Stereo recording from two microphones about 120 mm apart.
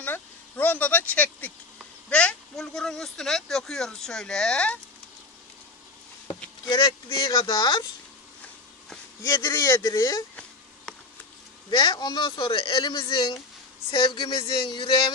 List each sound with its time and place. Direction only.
0.0 s a sound: 15° left (ahead or behind)
2.0 s speech: 10° left (ahead or behind)
6.6 s speech: 35° left (ahead or behind)
9.2 s speech: 20° left (ahead or behind)
11.7 s speech: 40° left (ahead or behind)